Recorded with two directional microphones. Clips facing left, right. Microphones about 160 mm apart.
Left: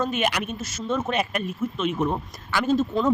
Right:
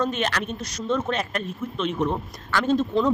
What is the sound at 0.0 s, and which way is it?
Speech, 10° left (ahead or behind).